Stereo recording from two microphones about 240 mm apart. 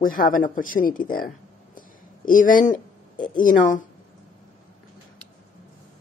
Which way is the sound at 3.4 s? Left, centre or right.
Left.